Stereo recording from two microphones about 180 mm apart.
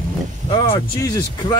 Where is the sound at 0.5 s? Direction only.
20° left (ahead or behind).